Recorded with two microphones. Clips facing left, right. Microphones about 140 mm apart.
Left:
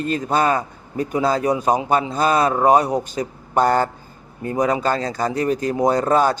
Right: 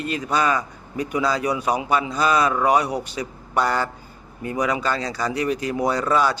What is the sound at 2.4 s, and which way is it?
A man's voice, 35° left (ahead or behind).